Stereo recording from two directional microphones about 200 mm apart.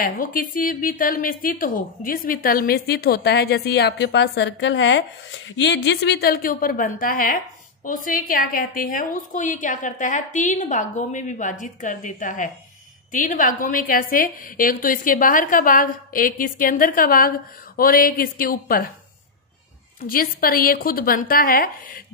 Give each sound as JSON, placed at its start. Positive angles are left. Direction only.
{"t": 0.0, "sound": "a woman's voice", "side_deg": 45}
{"t": 20.0, "sound": "a woman's voice", "side_deg": 45}